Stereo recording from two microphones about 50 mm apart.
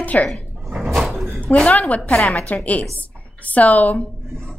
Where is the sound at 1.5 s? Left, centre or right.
Left.